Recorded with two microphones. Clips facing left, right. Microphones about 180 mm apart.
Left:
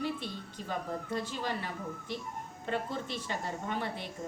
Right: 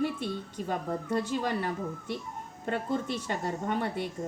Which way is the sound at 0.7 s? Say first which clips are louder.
Right 4 dB; 50° right (ahead or behind).